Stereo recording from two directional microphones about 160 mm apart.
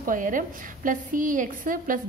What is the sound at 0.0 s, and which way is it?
A woman's voice, 55° right (ahead or behind).